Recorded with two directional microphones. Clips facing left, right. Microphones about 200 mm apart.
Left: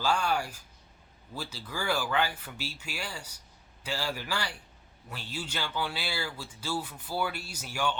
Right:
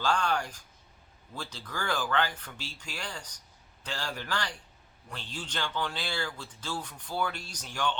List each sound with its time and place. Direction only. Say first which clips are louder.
0.0 s speech: even; 5° left (ahead or behind)